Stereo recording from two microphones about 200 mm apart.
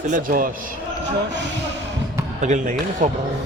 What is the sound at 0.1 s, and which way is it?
Speech, 45° right (ahead or behind).